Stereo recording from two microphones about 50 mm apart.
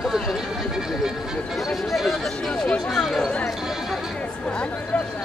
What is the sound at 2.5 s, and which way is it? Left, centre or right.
Speech, centre.